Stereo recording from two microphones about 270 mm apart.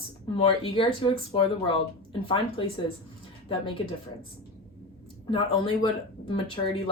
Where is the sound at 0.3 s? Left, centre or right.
Centre.